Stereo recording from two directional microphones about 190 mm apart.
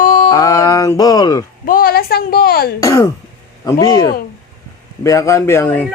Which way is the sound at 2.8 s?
15° left (ahead or behind).